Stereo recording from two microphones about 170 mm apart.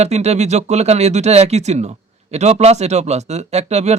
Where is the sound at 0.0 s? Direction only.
40° right (ahead or behind).